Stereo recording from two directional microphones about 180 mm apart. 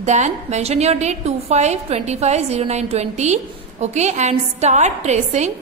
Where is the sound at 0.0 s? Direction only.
40° right (ahead or behind).